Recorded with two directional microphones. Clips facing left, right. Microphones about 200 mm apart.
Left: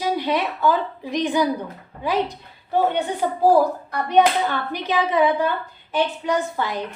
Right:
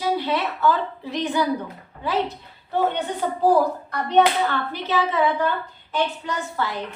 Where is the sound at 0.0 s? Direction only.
15° left (ahead or behind).